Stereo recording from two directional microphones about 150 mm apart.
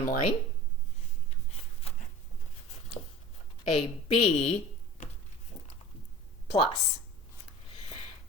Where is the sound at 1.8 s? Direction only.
45° left (ahead or behind).